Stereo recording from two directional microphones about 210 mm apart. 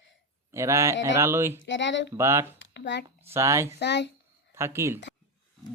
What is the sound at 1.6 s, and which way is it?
Speech, 60° left (ahead or behind).